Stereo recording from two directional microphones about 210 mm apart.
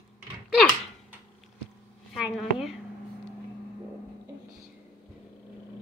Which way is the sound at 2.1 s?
Centre (ahead or behind).